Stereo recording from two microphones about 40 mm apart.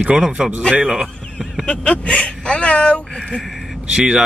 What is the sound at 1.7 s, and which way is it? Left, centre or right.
Speech, left.